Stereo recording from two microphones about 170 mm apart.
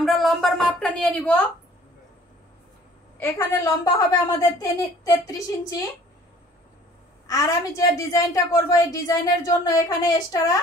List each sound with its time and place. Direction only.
0.0 s a woman's voice: centre (ahead or behind)
3.2 s a woman's voice: 20° left (ahead or behind)
7.2 s a woman's voice: 20° left (ahead or behind)